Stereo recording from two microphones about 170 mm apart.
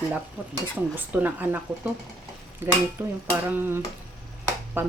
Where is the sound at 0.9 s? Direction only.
10° right (ahead or behind).